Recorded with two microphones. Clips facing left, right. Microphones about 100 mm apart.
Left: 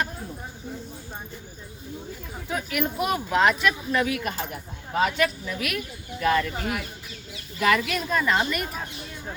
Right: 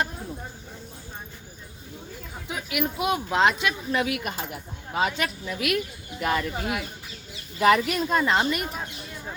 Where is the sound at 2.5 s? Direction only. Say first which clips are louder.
Left 1 dB; 15° right (ahead or behind).